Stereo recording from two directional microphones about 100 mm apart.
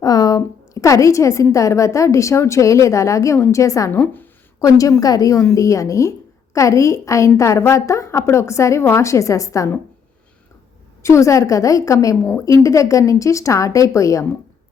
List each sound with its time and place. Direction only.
0.0 s a sound: 35° left (ahead or behind)
1.5 s a woman's voice: 30° left (ahead or behind)
4.0 s speech: 20° left (ahead or behind)
4.6 s a woman's voice: 35° left (ahead or behind)
11.0 s a woman's voice: 30° left (ahead or behind)